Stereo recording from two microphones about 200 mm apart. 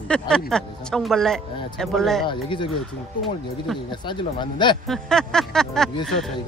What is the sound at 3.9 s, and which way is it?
Speech, 25° left (ahead or behind).